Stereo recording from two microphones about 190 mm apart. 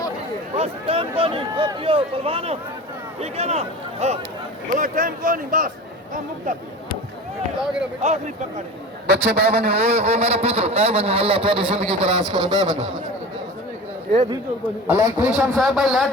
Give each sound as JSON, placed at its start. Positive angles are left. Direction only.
{"t": 0.5, "sound": "speech", "side_deg": -30}
{"t": 7.6, "sound": "speech", "side_deg": -5}
{"t": 9.0, "sound": "a man's voice", "side_deg": -60}
{"t": 9.7, "sound": "speech", "side_deg": -35}
{"t": 14.8, "sound": "a man's voice", "side_deg": -10}
{"t": 15.3, "sound": "speech", "side_deg": 0}